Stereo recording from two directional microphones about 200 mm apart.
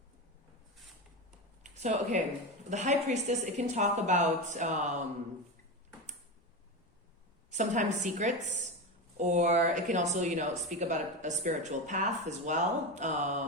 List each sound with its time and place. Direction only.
1.6 s a woman's voice: 35° right (ahead or behind)
7.5 s a woman's voice: 35° right (ahead or behind)